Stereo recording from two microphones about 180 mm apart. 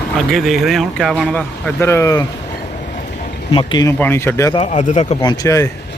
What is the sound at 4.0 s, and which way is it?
Speech, 10° left (ahead or behind).